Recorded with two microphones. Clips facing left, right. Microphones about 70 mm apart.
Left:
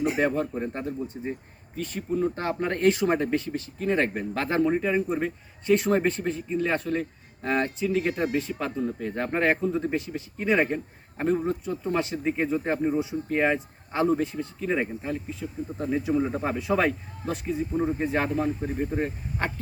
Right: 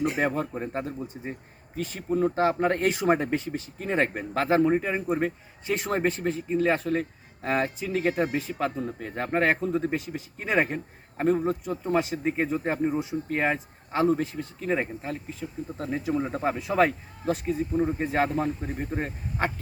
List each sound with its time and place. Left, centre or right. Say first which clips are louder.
0.2 s speech: left 2 dB; centre
1.8 s speech: right 1 dB; centre